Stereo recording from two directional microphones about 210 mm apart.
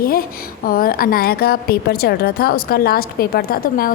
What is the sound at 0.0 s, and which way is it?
A woman's voice, 45° left (ahead or behind).